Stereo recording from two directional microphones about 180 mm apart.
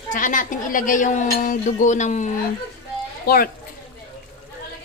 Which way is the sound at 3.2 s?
55° left (ahead or behind).